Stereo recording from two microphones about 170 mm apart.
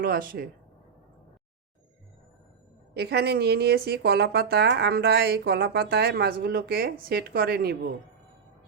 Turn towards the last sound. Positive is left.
turn(degrees=-65)  # may be behind; listen again after turning